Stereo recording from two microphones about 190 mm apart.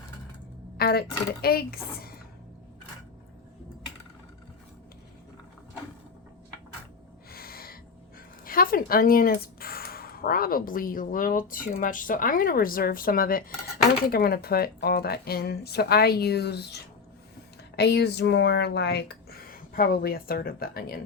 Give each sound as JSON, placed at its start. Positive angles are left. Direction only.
{"t": 0.8, "sound": "a woman's voice", "side_deg": 55}
{"t": 7.3, "sound": "gasp", "side_deg": 50}
{"t": 8.4, "sound": "a woman's voice", "side_deg": 50}
{"t": 17.7, "sound": "a woman's voice", "side_deg": 60}